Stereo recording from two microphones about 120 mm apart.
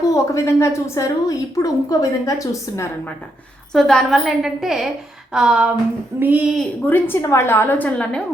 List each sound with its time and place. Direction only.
0.1 s a woman's voice: 25° left (ahead or behind)
3.7 s a woman's voice: 5° left (ahead or behind); by 6.4 s 15° right (ahead or behind)
6.8 s a woman's voice: 15° left (ahead or behind)